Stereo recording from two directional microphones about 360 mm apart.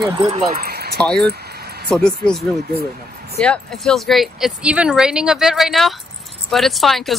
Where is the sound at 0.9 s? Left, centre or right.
Centre.